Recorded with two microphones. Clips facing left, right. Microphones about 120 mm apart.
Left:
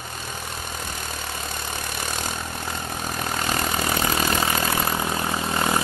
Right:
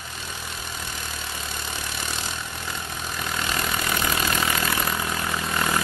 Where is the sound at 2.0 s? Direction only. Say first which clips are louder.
Left 3 dB; 45° left (ahead or behind).